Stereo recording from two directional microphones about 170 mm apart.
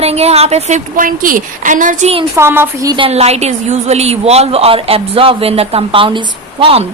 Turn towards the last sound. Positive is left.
turn(degrees=-30)  # may be behind; listen again after turning